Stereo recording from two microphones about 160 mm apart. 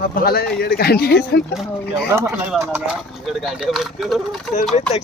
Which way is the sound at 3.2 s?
Centre (ahead or behind).